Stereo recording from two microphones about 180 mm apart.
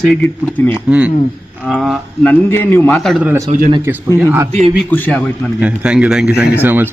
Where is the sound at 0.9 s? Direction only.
5° right (ahead or behind).